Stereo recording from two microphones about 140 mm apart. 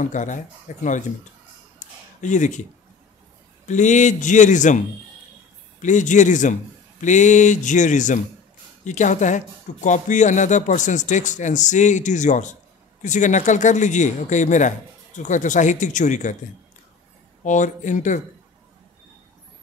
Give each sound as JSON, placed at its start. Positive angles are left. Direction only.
{"t": 0.0, "sound": "speech", "side_deg": 60}
{"t": 1.8, "sound": "a sound", "side_deg": 60}
{"t": 3.6, "sound": "speech", "side_deg": 60}
{"t": 17.4, "sound": "speech", "side_deg": 60}